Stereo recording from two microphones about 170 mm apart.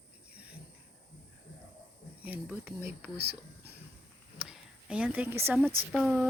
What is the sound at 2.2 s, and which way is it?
Speech, 10° right (ahead or behind).